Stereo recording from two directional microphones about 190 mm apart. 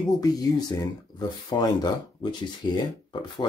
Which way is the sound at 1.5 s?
20° left (ahead or behind).